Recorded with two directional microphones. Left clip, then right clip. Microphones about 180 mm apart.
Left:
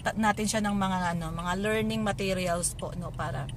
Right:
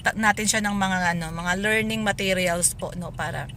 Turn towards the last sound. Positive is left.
turn(degrees=-15)  # may be behind; listen again after turning